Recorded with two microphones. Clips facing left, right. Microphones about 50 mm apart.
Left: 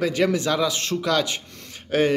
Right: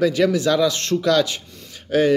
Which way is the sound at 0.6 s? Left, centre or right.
Centre.